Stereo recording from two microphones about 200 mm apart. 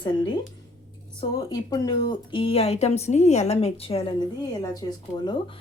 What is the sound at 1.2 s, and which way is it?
Speech, 20° left (ahead or behind).